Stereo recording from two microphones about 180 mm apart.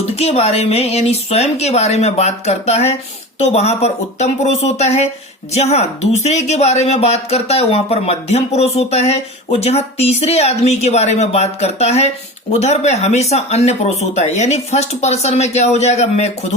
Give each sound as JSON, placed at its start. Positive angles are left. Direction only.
{"t": 0.2, "sound": "speech", "side_deg": 35}